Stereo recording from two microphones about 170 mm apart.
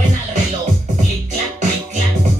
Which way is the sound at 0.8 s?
45° right (ahead or behind).